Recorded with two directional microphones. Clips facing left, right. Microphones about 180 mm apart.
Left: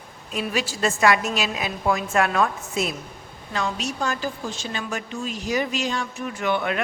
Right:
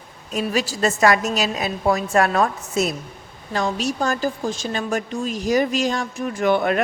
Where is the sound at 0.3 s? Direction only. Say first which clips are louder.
Right 4 dB; 40° right (ahead or behind).